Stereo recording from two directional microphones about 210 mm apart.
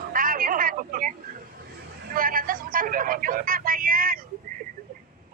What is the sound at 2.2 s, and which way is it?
Speech, 40° right (ahead or behind).